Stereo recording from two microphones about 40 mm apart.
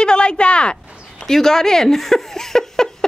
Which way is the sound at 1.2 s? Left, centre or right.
Centre.